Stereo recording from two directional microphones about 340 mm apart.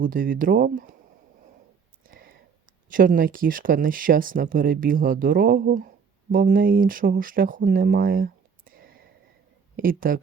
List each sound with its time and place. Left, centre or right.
0.0 s speech: right
2.0 s a sound: right
2.9 s speech: right